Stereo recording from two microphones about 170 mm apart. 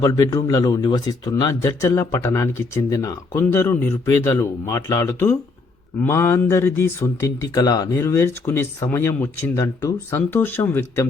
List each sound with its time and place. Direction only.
0.0 s speech: 20° left (ahead or behind)